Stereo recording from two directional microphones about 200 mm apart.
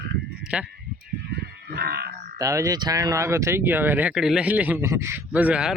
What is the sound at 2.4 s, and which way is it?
Speech, 15° right (ahead or behind).